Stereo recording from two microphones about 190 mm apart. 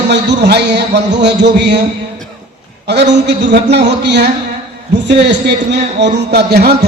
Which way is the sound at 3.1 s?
65° right (ahead or behind).